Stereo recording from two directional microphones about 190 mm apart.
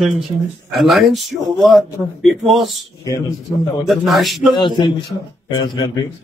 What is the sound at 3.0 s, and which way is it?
Speech, 15° left (ahead or behind).